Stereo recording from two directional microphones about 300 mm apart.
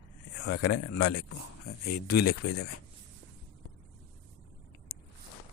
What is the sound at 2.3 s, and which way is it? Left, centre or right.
Speech, left.